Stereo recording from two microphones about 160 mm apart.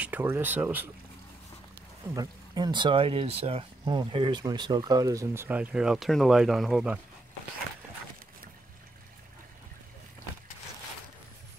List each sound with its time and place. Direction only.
0.0 s speech: 10° right (ahead or behind)
2.1 s speech: 25° right (ahead or behind); by 7.0 s 5° right (ahead or behind)